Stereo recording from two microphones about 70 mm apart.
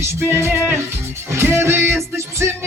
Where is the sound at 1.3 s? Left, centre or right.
Right.